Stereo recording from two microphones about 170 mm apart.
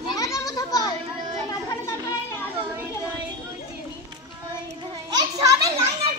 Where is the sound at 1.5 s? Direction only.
20° left (ahead or behind).